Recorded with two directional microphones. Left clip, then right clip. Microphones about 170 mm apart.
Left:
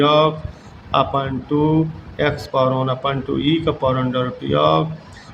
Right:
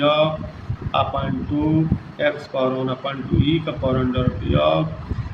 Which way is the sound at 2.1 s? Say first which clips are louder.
Left 3 dB; 75° left (ahead or behind).